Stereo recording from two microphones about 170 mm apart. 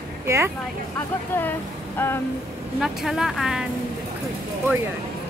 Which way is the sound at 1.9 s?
15° left (ahead or behind).